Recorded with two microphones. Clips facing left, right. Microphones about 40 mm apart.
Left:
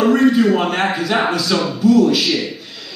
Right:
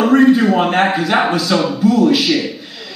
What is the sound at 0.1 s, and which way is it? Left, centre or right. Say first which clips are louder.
A man's voice: right 2 dB; right.